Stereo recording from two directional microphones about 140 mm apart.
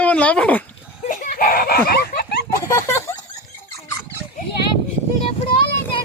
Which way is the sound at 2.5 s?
20° left (ahead or behind).